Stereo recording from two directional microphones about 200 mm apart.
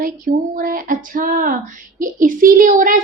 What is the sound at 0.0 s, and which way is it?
A woman's voice, 45° right (ahead or behind).